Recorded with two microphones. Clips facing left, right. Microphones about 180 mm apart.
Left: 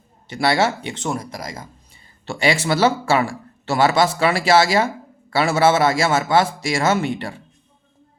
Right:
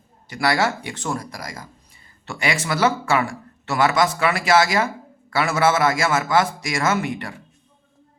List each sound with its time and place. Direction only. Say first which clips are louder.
0.3 s speech: left 2 dB; 25° left (ahead or behind)